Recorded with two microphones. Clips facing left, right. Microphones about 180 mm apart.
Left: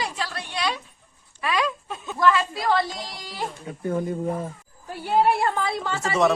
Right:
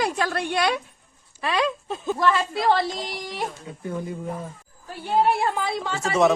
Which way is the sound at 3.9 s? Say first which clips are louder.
Left 5 dB; 50° left (ahead or behind).